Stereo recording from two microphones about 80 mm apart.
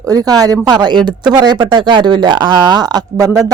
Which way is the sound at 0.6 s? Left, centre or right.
Right.